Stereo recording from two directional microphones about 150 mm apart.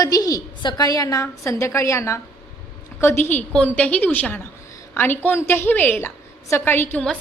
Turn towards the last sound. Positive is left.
turn(degrees=15)  # may be behind; listen again after turning